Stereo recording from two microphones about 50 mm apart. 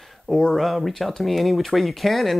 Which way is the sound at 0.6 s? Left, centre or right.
Centre.